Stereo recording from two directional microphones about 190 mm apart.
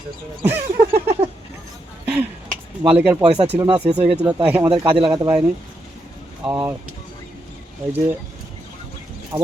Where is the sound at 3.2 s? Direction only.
30° right (ahead or behind).